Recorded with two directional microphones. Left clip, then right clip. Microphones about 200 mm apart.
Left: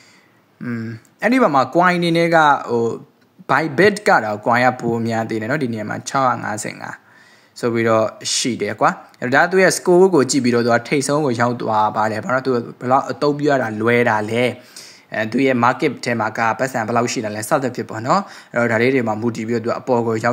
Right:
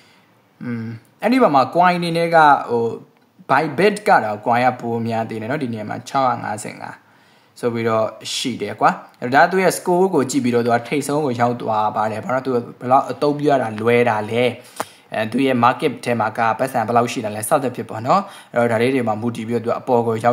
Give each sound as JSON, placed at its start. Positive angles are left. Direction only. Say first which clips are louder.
{"t": 0.7, "sound": "speech", "louder": "left 1 dB", "side_deg": 5}